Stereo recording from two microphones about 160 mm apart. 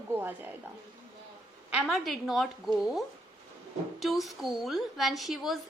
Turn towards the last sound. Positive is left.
turn(degrees=0)  # may be behind; listen again after turning